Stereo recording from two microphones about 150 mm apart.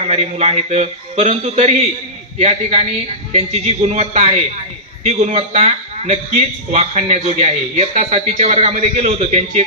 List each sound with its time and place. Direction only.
0.0 s a man's voice: 45° right (ahead or behind)